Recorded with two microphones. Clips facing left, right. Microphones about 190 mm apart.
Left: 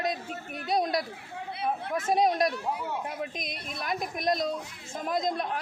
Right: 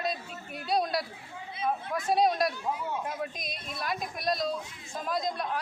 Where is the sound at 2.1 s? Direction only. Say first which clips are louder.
Left 1 dB; 20° left (ahead or behind).